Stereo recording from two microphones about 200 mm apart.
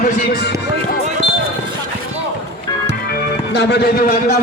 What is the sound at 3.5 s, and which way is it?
Speech, 55° left (ahead or behind).